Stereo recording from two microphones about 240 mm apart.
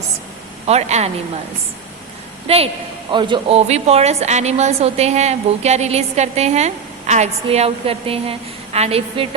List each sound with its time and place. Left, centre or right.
0.7 s a woman's voice: right
2.5 s a woman's voice: right